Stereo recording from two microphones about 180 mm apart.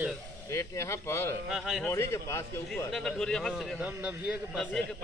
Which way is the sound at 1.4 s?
Centre (ahead or behind).